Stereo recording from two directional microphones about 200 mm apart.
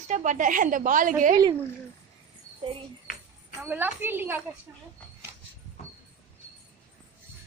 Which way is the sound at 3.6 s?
10° right (ahead or behind).